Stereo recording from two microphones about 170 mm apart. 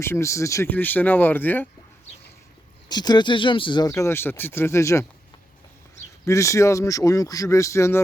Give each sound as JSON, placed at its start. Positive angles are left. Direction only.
{"t": 0.0, "sound": "speech", "side_deg": 15}
{"t": 2.9, "sound": "speech", "side_deg": 25}
{"t": 6.2, "sound": "speech", "side_deg": 15}